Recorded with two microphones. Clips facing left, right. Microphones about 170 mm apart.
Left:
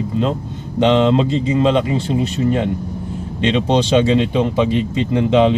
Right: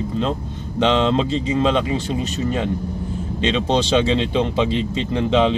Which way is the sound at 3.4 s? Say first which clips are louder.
Left 3 dB; 15° left (ahead or behind).